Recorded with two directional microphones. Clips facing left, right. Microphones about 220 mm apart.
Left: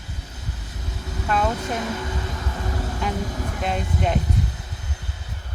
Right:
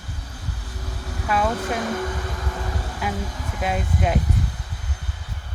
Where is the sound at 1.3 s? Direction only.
5° right (ahead or behind).